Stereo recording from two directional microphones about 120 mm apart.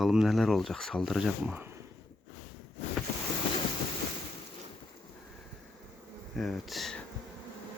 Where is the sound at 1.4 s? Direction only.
15° right (ahead or behind).